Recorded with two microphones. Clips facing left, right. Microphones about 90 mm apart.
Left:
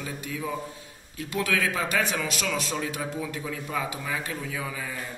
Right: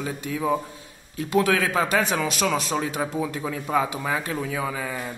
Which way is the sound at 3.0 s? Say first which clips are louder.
Right 5 dB; 40° right (ahead or behind).